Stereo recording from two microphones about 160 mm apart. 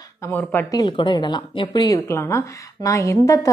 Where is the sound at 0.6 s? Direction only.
25° left (ahead or behind).